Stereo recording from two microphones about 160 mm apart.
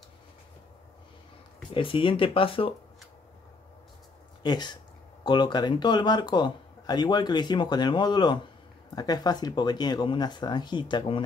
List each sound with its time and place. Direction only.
1.7 s speech: 35° left (ahead or behind)
4.4 s speech: 25° left (ahead or behind)